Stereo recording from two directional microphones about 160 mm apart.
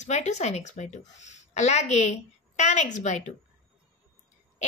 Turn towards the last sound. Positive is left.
turn(degrees=45)  # may be behind; listen again after turning